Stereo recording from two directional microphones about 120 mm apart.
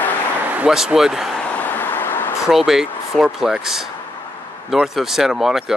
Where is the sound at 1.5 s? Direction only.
15° left (ahead or behind).